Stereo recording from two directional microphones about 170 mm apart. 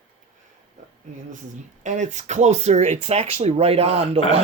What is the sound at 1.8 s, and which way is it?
Speech, 45° right (ahead or behind).